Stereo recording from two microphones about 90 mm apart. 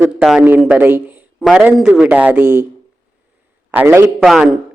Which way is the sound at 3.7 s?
20° right (ahead or behind).